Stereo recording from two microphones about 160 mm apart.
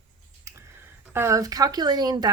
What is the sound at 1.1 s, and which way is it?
A woman's voice, 20° right (ahead or behind).